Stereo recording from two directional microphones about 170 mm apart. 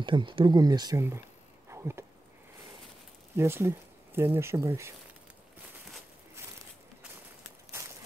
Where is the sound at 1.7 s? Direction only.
15° right (ahead or behind).